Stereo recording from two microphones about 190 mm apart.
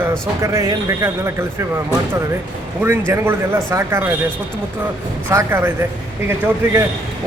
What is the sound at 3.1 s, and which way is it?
Speech, 10° right (ahead or behind).